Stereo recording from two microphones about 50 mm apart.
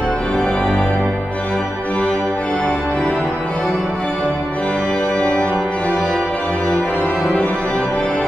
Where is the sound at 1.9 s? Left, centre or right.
Centre.